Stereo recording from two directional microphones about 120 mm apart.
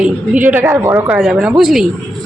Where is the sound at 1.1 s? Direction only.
5° right (ahead or behind).